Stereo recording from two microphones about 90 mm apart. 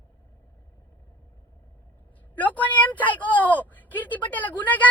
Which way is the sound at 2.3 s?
20° left (ahead or behind).